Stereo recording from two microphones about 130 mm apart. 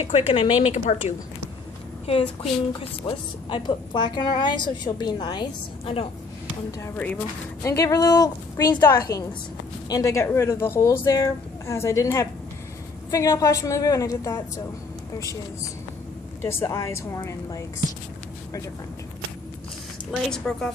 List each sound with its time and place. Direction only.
0.3 s a woman's voice: 50° left (ahead or behind)
3.0 s a woman's voice: 35° left (ahead or behind)
7.0 s speech: 10° left (ahead or behind)
7.6 s speech: 25° left (ahead or behind)
20.1 s a woman's voice: 5° left (ahead or behind)